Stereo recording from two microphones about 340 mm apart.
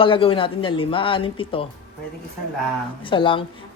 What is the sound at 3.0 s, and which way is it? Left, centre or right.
Speech, centre.